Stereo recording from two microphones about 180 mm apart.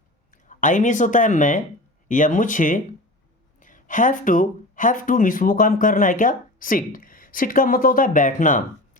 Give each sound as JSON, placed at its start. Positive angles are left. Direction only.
{"t": 0.4, "sound": "speech", "side_deg": 45}